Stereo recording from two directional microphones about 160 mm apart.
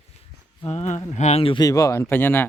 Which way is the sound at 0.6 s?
40° left (ahead or behind).